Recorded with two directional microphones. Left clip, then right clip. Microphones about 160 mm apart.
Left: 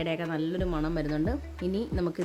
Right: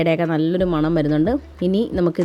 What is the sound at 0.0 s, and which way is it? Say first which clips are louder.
A woman's voice: right 12 dB; 30° right (ahead or behind).